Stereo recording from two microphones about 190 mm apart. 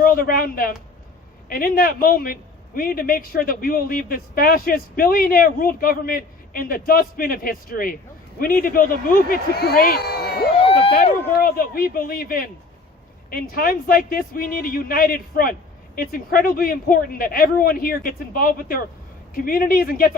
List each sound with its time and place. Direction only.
0.0 s a woman's voice: 50° left (ahead or behind)
10.6 s a sound: 30° left (ahead or behind)
10.9 s a man's voice: 55° left (ahead or behind)